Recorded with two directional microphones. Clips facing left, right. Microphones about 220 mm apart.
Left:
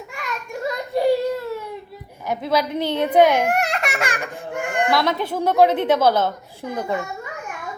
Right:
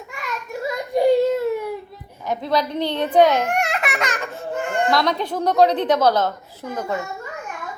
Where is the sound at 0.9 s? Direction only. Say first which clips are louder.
Right 3 dB; 20° right (ahead or behind).